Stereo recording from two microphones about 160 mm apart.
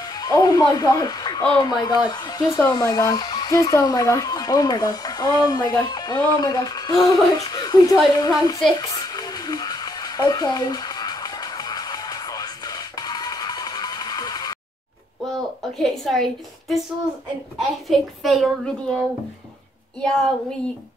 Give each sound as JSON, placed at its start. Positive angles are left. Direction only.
{"t": 0.1, "sound": "speech", "side_deg": 25}
{"t": 2.0, "sound": "hair dryer", "side_deg": 25}
{"t": 15.8, "sound": "a woman's voice", "side_deg": 0}
{"t": 20.0, "sound": "a woman's voice", "side_deg": 5}